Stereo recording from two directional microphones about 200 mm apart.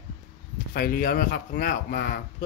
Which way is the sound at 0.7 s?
50° left (ahead or behind).